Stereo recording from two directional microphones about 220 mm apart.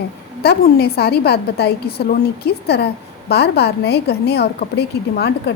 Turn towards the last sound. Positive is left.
turn(degrees=50)  # may be behind; listen again after turning